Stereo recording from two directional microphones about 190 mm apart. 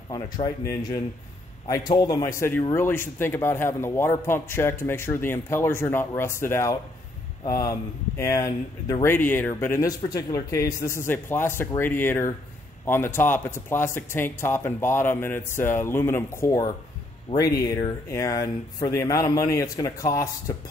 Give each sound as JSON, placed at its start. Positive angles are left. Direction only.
{"t": 0.1, "sound": "speech", "side_deg": 20}
{"t": 17.3, "sound": "speech", "side_deg": 30}
{"t": 17.6, "sound": "speech", "side_deg": 20}